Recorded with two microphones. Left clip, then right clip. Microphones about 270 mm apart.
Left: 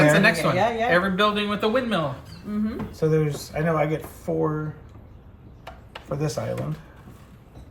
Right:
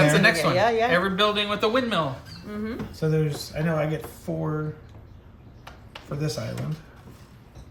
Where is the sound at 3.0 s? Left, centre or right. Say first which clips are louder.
Left 3 dB; centre.